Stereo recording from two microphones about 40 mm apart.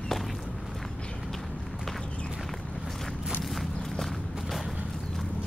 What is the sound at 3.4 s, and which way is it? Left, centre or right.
Walk, centre.